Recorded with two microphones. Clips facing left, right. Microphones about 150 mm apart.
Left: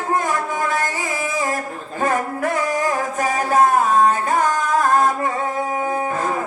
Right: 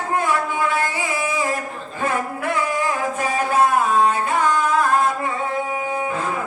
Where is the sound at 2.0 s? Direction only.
40° left (ahead or behind).